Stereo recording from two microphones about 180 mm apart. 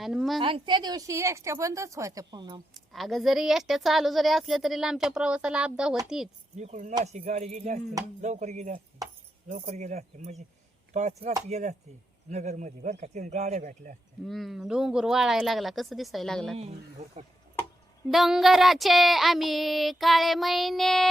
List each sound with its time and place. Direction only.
0.0 s a woman's voice: centre (ahead or behind)
0.3 s a woman's voice: 25° right (ahead or behind)
2.7 s a woman's voice: centre (ahead or behind)
6.6 s speech: 40° right (ahead or behind)
14.3 s a woman's voice: centre (ahead or behind)
16.6 s speech: 35° right (ahead or behind)
18.1 s a woman's voice: centre (ahead or behind)